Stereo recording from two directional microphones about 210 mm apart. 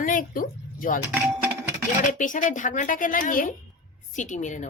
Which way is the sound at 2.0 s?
40° left (ahead or behind).